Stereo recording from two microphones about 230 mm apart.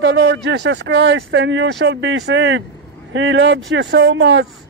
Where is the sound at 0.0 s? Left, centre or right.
Right.